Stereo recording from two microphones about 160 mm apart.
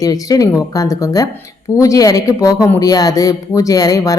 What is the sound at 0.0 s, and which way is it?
Speech, 20° left (ahead or behind).